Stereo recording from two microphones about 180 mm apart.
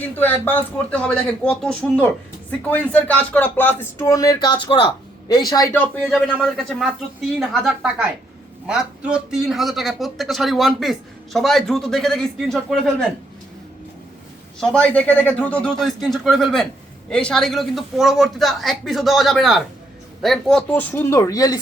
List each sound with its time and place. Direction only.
0.2 s speech: 10° left (ahead or behind)
5.7 s a man's voice: 5° left (ahead or behind)
14.6 s a man's voice: 5° left (ahead or behind)